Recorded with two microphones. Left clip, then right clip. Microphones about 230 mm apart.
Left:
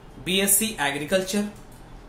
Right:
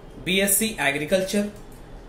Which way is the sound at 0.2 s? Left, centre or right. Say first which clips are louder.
Right 1 dB; centre.